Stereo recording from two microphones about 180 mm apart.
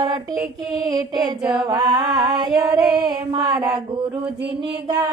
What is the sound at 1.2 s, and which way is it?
Female singing, 5° right (ahead or behind).